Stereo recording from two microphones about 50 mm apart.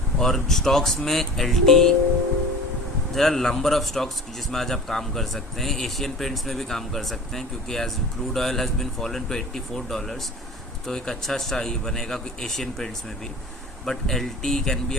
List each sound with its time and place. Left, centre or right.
0.2 s speech: centre
3.2 s a man's voice: centre